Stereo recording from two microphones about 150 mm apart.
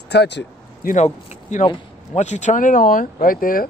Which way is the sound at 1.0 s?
45° left (ahead or behind).